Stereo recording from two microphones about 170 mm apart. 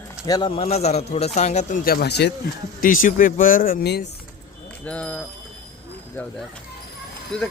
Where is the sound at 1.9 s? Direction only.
70° left (ahead or behind).